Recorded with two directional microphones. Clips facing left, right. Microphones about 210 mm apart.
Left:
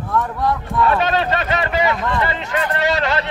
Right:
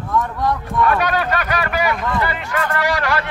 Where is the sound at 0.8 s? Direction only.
25° left (ahead or behind).